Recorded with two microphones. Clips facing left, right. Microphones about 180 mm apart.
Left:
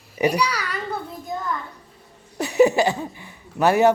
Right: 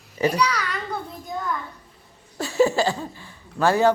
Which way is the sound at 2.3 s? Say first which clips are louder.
Left 3 dB; 20° left (ahead or behind).